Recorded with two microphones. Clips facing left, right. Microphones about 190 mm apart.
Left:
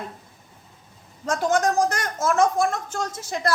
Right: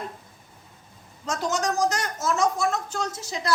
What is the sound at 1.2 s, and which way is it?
Speech, 55° left (ahead or behind).